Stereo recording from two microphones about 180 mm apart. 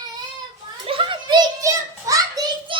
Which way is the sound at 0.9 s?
30° right (ahead or behind).